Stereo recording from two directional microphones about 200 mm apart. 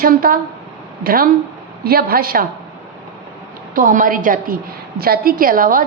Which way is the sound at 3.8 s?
40° right (ahead or behind).